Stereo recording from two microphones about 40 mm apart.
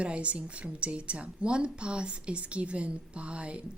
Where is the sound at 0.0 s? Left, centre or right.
Right.